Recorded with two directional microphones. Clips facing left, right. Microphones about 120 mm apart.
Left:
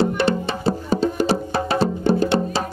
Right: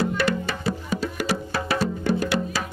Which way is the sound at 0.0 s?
30° left (ahead or behind).